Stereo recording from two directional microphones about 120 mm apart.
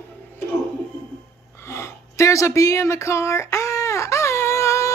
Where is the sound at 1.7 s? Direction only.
25° left (ahead or behind).